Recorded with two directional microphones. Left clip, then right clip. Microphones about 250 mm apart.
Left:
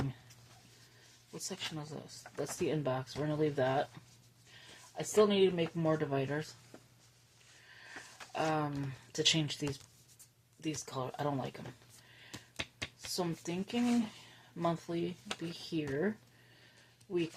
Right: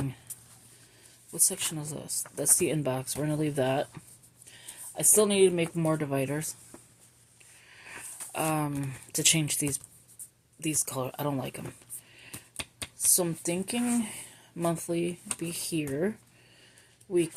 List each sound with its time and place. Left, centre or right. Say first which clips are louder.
1.3 s speech: right 9 dB; right
4.9 s speech: right 5 dB; right
7.7 s a sound: right 5 dB; right
10.6 s speech: right 7 dB; right
12.3 s finger snapping: right 2 dB; centre
13.1 s speech: right 5 dB; right